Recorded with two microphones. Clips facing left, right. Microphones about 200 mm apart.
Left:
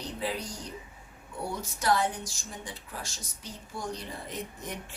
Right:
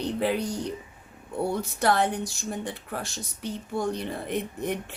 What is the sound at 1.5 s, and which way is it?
Speech, 60° right (ahead or behind).